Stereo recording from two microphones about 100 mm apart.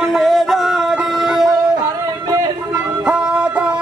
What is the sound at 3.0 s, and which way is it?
Music, 10° right (ahead or behind).